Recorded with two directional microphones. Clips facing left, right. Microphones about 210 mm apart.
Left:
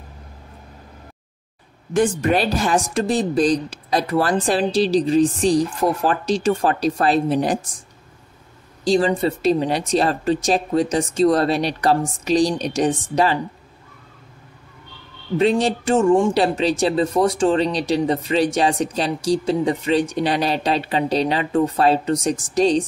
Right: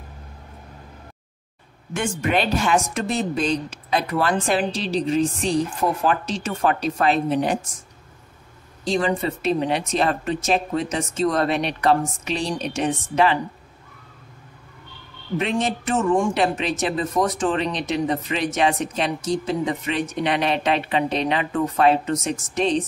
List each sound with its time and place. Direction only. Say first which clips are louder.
2.0 s speech: left 5 dB; 40° left (ahead or behind)
8.8 s speech: left 4 dB; 35° left (ahead or behind)
15.3 s speech: left 6 dB; 35° left (ahead or behind)